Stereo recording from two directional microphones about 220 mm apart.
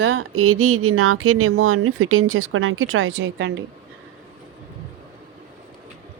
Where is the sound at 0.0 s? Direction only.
65° right (ahead or behind).